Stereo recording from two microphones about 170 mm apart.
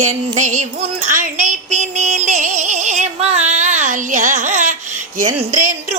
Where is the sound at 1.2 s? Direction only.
45° right (ahead or behind).